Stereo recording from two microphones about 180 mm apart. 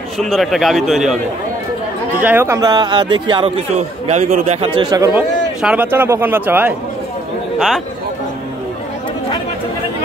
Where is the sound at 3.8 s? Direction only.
40° right (ahead or behind); by 5.1 s 20° right (ahead or behind).